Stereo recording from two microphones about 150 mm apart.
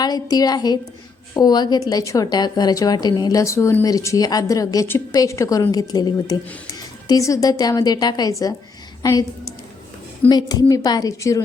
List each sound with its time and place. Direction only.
0.0 s a woman's voice: 25° left (ahead or behind)
10.2 s a woman's voice: 25° left (ahead or behind)